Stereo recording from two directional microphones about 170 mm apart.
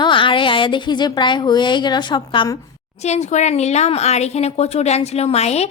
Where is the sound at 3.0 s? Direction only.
40° left (ahead or behind).